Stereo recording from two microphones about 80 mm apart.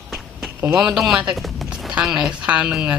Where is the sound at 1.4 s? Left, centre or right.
Centre.